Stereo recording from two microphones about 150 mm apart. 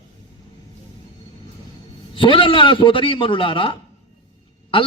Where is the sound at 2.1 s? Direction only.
35° left (ahead or behind).